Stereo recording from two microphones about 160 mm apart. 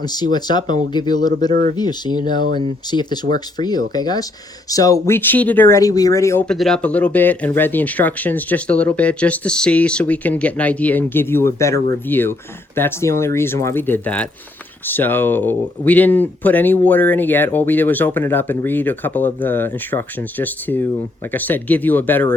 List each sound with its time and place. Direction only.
0.0 s speech: 25° left (ahead or behind)
6.4 s speech: 5° left (ahead or behind)